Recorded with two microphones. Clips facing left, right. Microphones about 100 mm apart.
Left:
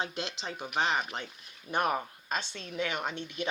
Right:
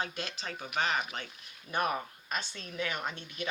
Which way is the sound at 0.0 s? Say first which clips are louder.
Left 2 dB; 20° left (ahead or behind).